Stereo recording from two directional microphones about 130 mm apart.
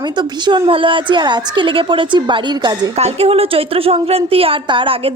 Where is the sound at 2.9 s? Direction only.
50° right (ahead or behind).